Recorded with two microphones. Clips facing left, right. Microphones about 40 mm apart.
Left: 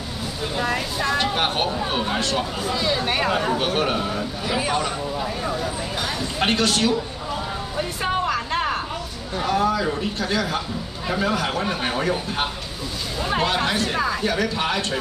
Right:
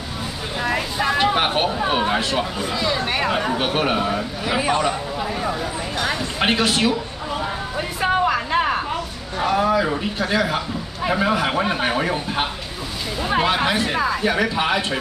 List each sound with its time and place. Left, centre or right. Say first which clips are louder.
0.6 s a man's voice: right 2 dB; centre
3.3 s a man's voice: right 1 dB; centre
7.7 s a sound: right 3 dB; centre
9.4 s a man's voice: right 3 dB; centre